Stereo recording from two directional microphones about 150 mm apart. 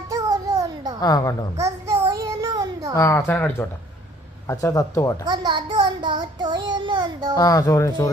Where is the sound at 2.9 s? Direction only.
20° left (ahead or behind).